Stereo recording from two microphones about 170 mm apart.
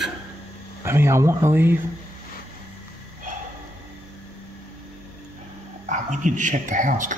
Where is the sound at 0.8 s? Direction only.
15° right (ahead or behind).